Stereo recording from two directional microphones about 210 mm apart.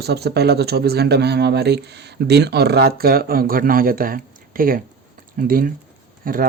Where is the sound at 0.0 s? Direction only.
50° right (ahead or behind).